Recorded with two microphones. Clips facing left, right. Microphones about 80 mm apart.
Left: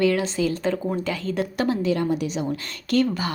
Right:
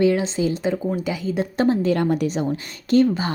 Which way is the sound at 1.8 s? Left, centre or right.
Right.